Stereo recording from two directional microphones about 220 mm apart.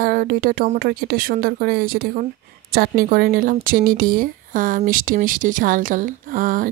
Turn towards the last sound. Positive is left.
turn(degrees=-40)  # may be behind; listen again after turning